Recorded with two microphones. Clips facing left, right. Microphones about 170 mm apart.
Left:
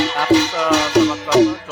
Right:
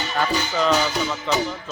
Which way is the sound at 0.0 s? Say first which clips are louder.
Left 9 dB; 75° left (ahead or behind).